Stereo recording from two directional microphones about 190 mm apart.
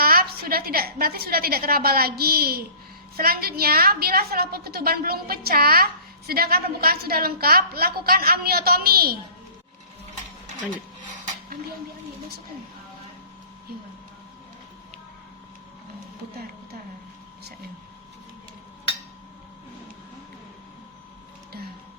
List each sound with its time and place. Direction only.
0.0 s a woman's voice: 50° right (ahead or behind)